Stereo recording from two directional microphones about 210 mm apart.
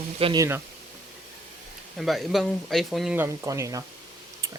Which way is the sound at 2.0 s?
Centre (ahead or behind).